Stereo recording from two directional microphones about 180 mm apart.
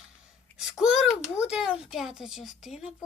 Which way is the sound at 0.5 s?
5° right (ahead or behind).